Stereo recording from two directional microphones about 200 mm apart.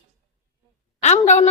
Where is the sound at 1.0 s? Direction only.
35° left (ahead or behind).